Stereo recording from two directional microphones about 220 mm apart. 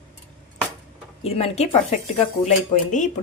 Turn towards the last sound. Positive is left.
turn(degrees=35)  # may be behind; listen again after turning